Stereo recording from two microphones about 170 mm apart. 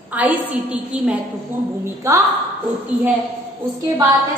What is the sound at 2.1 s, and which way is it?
Speech, 20° right (ahead or behind).